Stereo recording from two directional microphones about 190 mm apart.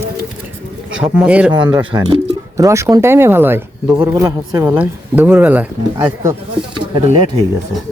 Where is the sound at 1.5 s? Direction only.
25° right (ahead or behind).